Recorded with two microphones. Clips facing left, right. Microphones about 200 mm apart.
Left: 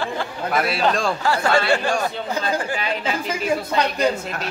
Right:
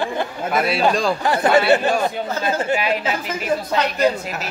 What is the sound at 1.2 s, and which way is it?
Speech, 20° right (ahead or behind).